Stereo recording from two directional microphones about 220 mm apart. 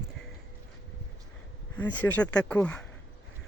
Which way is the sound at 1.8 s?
10° left (ahead or behind).